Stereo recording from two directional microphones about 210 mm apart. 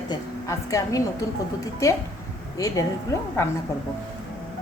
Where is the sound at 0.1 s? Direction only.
15° left (ahead or behind).